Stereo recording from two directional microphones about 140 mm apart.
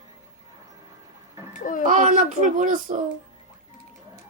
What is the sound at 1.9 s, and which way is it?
Speech, 65° right (ahead or behind).